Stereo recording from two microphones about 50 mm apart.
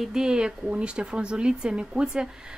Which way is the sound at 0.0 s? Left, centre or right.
Centre.